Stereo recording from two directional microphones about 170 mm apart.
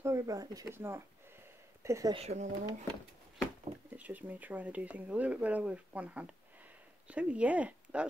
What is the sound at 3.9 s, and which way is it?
Speech, 10° right (ahead or behind).